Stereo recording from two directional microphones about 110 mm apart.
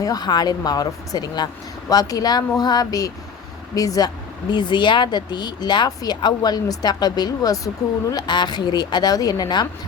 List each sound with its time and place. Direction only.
0.0 s speech: 35° left (ahead or behind)